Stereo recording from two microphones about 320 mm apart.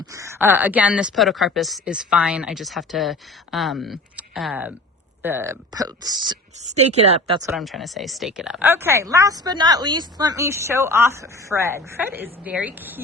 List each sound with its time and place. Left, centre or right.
0.0 s speech: centre
7.5 s speech: centre